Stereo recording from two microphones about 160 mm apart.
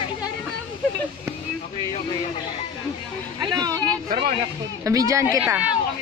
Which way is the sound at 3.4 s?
25° right (ahead or behind).